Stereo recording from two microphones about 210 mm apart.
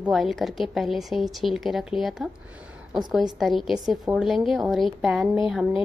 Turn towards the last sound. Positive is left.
turn(degrees=0)  # may be behind; listen again after turning